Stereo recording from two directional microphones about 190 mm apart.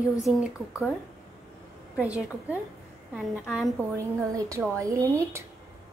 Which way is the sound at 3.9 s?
15° right (ahead or behind).